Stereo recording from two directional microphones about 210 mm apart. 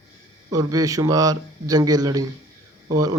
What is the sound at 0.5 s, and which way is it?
Speech, 15° right (ahead or behind).